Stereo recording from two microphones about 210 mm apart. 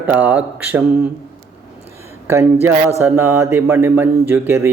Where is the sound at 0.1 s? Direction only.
10° right (ahead or behind).